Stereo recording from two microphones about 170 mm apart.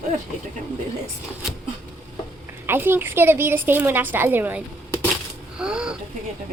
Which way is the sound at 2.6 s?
10° right (ahead or behind).